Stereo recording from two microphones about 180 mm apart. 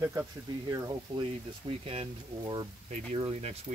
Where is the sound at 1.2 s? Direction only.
30° right (ahead or behind).